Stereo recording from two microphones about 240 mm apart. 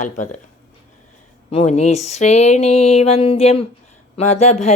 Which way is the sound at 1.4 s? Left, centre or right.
Left.